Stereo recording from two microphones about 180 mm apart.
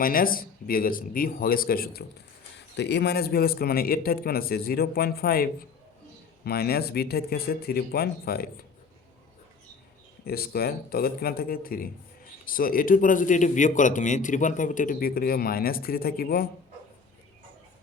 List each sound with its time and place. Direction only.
0.0 s speech: 50° left (ahead or behind)
2.7 s a man's voice: 70° left (ahead or behind)
10.2 s a man's voice: 60° left (ahead or behind)